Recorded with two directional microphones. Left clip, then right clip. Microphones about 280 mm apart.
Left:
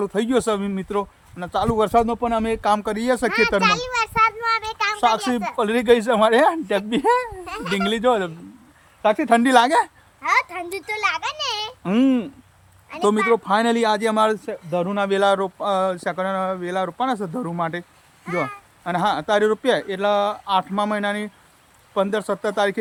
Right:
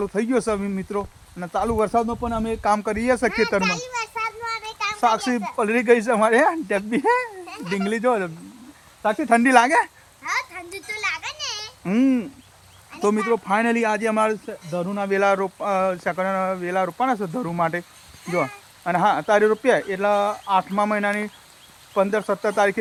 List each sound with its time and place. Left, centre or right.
0.0 s speech: centre
3.8 s a sound: left
4.3 s child singing: centre
4.9 s speech: centre
10.8 s a sound: centre
13.3 s speech: centre